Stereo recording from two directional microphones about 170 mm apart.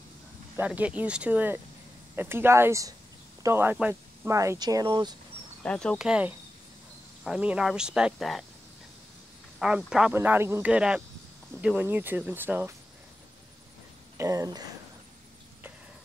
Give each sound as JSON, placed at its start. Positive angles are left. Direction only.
{"t": 0.6, "sound": "speech", "side_deg": -10}
{"t": 5.6, "sound": "speech", "side_deg": 5}
{"t": 9.6, "sound": "speech", "side_deg": -5}
{"t": 14.1, "sound": "speech", "side_deg": -20}